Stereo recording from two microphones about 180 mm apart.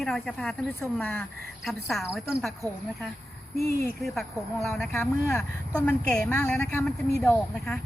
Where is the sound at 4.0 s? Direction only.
Centre (ahead or behind).